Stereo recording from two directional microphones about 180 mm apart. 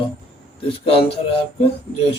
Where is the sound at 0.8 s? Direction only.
30° left (ahead or behind).